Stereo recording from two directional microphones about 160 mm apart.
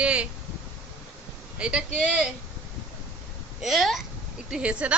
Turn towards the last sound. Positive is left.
turn(degrees=-5)  # may be behind; listen again after turning